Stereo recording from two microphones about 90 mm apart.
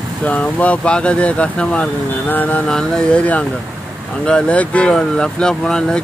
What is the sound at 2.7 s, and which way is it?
Speech, 10° left (ahead or behind).